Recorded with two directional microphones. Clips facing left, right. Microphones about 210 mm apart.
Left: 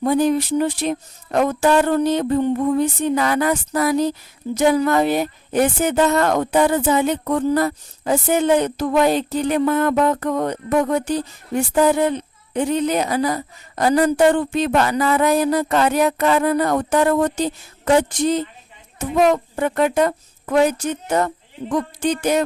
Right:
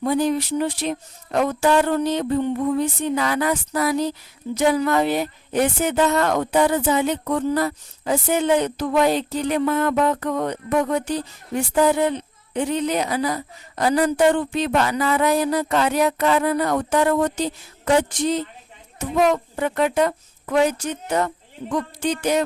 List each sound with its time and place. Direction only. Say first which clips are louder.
0.0 s speech: left 3 dB; 50° left (ahead or behind)